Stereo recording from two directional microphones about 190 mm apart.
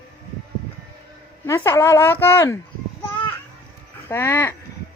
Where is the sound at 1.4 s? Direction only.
15° left (ahead or behind).